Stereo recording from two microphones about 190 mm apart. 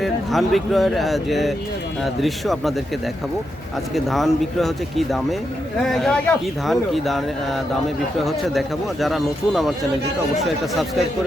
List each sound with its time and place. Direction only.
0.0 s speech: centre (ahead or behind)
3.9 s speech: centre (ahead or behind)